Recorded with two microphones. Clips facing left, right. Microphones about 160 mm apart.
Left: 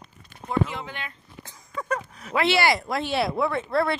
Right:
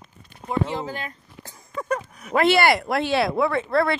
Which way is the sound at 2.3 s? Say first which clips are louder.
Right 4 dB; 50° right (ahead or behind).